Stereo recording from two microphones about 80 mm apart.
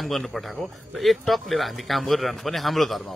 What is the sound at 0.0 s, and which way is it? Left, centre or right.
Speech, centre.